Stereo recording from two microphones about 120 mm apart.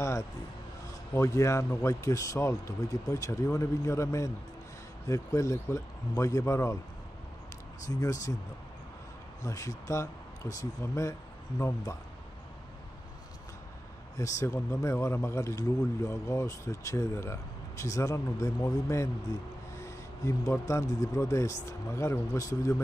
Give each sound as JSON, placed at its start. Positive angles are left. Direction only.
{"t": 1.1, "sound": "speech", "side_deg": 25}
{"t": 7.9, "sound": "speech", "side_deg": 30}
{"t": 9.4, "sound": "speech", "side_deg": 25}
{"t": 14.1, "sound": "speech", "side_deg": 25}
{"t": 20.2, "sound": "speech", "side_deg": 25}